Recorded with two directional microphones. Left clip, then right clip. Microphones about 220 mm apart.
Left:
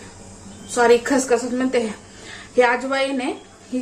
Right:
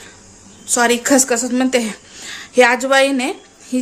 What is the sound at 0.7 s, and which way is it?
A woman's voice, 50° right (ahead or behind).